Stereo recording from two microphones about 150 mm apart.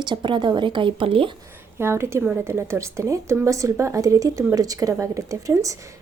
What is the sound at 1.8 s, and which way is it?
A woman's voice, 15° right (ahead or behind).